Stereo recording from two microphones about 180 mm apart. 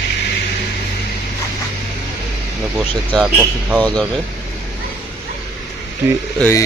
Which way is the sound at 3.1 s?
5° right (ahead or behind).